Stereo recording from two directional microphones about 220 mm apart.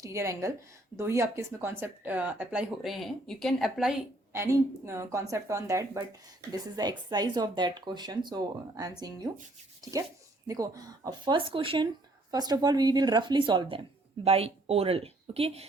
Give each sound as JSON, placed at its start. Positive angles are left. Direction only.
{"t": 0.0, "sound": "speech", "side_deg": -15}
{"t": 10.4, "sound": "speech", "side_deg": -15}